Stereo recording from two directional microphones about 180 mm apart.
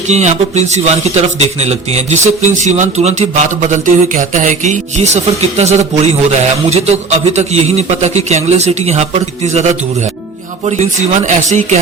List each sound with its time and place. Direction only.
0.1 s a man's voice: 40° right (ahead or behind)
10.7 s a man's voice: 40° right (ahead or behind)